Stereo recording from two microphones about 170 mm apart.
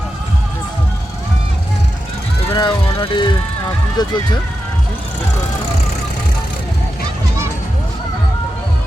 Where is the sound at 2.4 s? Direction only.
30° left (ahead or behind).